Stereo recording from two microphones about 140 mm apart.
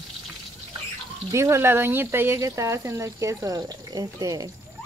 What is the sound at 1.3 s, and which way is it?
Speech, 20° right (ahead or behind).